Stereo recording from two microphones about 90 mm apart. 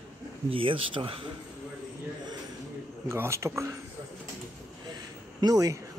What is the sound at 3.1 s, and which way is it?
Speech, 30° right (ahead or behind).